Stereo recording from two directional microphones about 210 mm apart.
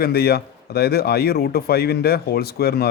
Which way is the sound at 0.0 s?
50° left (ahead or behind).